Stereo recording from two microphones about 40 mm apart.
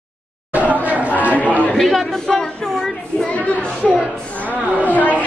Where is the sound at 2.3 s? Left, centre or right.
Centre.